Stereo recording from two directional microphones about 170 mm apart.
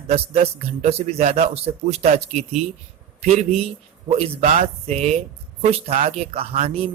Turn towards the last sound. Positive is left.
turn(degrees=-35)  # may be behind; listen again after turning